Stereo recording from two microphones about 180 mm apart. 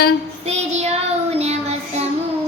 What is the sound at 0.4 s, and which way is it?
Child singing, 35° right (ahead or behind).